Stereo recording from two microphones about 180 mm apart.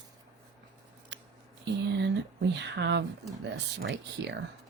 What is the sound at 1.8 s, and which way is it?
Speech, 70° right (ahead or behind).